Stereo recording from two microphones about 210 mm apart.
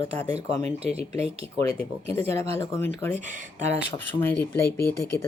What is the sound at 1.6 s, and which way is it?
Speech, 10° left (ahead or behind).